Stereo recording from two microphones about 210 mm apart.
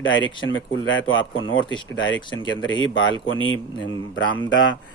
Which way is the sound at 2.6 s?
65° left (ahead or behind).